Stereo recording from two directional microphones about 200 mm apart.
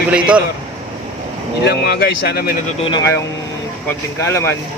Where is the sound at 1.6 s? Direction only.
55° left (ahead or behind).